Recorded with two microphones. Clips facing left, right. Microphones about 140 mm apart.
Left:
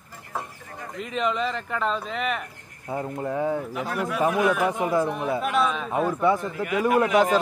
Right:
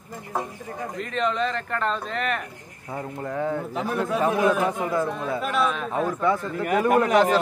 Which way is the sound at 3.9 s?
25° right (ahead or behind).